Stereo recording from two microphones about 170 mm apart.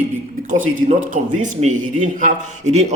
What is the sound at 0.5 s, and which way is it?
Speech, 50° right (ahead or behind).